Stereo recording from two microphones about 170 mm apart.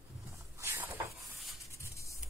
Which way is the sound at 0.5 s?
15° right (ahead or behind).